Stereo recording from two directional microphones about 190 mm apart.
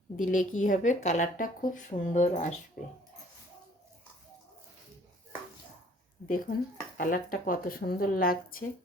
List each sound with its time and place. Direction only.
0.2 s speech: 40° left (ahead or behind)
6.2 s speech: 45° left (ahead or behind)